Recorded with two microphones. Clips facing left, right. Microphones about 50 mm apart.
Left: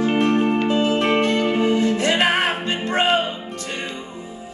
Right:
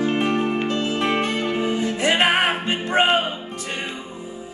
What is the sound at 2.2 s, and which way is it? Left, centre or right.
Music, centre.